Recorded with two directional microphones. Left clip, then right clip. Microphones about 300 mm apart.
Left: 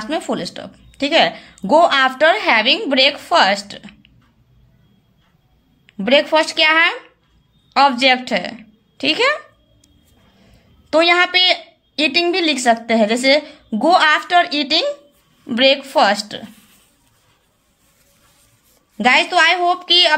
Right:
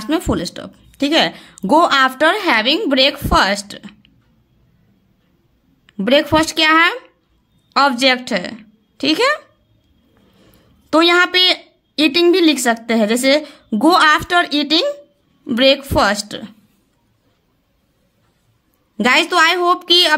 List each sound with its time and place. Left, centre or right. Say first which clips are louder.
0.0 s speech: right 2 dB; right
5.9 s a woman's voice: even; right
10.4 s a woman's voice: right 1 dB; right
19.0 s speech: even; right